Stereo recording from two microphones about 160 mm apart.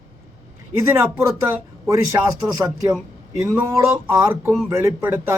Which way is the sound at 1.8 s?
20° right (ahead or behind).